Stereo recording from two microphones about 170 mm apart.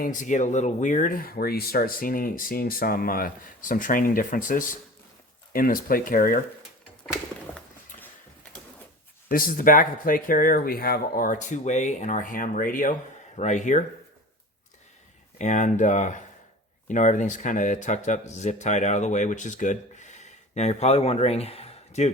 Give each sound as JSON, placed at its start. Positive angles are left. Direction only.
{"t": 0.0, "sound": "speech", "side_deg": 50}
{"t": 9.3, "sound": "speech", "side_deg": 55}
{"t": 15.4, "sound": "speech", "side_deg": 45}